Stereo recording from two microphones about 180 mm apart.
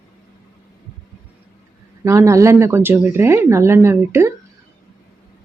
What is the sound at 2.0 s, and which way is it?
Speech, 15° right (ahead or behind).